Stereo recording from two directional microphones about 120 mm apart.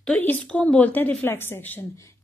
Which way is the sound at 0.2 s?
10° left (ahead or behind).